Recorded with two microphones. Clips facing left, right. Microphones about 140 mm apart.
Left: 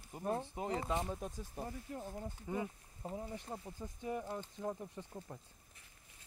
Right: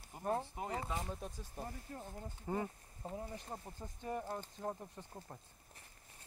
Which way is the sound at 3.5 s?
40° right (ahead or behind).